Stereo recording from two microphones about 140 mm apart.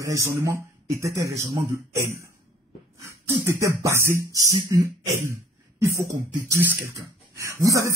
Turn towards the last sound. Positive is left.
turn(degrees=-20)  # may be behind; listen again after turning